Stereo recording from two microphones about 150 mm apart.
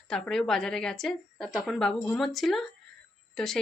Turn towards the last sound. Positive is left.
turn(degrees=0)  # may be behind; listen again after turning